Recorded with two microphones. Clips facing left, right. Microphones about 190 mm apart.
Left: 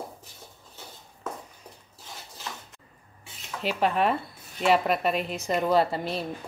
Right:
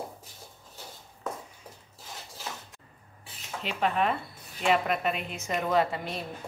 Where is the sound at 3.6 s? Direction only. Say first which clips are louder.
Left 3 dB; 40° left (ahead or behind).